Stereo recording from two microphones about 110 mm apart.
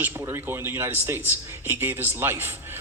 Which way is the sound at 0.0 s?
20° right (ahead or behind).